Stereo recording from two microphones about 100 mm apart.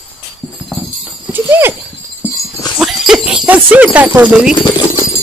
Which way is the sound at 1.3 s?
20° right (ahead or behind).